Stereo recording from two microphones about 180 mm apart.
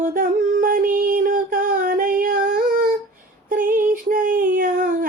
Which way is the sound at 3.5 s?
45° right (ahead or behind).